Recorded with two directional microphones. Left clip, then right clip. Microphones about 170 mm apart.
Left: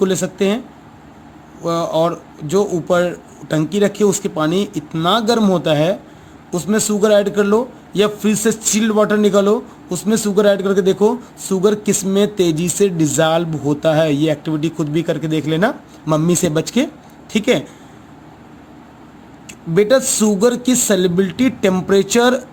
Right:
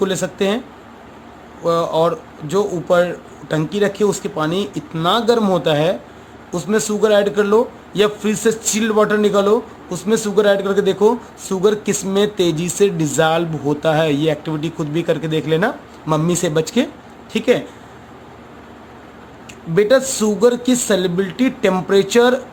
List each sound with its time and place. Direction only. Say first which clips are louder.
0.0 s a man's voice: left 1 dB; 40° left (ahead or behind)
1.6 s a man's voice: right 1 dB; 40° left (ahead or behind)
19.7 s speech: even; 45° left (ahead or behind)